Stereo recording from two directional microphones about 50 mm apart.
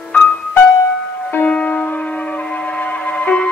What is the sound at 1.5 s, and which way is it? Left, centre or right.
Music, left.